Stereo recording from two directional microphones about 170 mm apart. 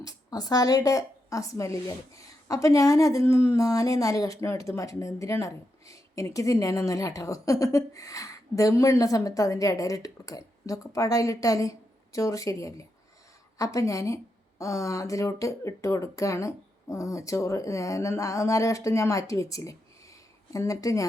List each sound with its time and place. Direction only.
0.0 s a woman's voice: 20° left (ahead or behind)